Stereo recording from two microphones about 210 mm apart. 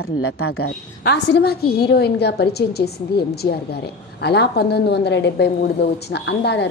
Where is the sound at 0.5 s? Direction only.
50° left (ahead or behind).